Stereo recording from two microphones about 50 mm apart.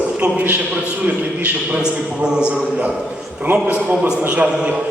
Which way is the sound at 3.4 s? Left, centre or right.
Right.